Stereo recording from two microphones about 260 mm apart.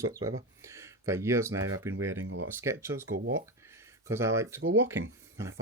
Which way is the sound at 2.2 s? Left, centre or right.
Right.